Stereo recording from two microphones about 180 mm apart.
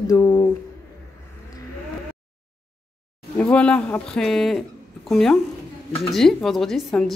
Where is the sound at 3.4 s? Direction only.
5° left (ahead or behind).